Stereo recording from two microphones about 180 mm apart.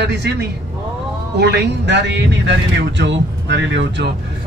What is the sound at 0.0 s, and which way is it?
Speech, 65° right (ahead or behind).